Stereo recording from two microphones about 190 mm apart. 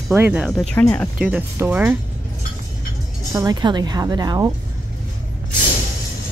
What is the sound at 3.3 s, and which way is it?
Speech, 20° right (ahead or behind).